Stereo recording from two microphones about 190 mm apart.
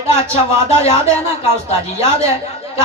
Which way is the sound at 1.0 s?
15° right (ahead or behind).